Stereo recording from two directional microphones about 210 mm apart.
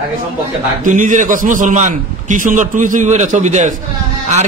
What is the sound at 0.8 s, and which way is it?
A man's voice, 40° right (ahead or behind).